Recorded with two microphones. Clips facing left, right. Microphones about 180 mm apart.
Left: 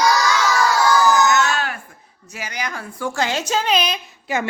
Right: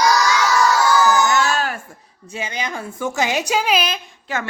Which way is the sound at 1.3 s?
35° right (ahead or behind).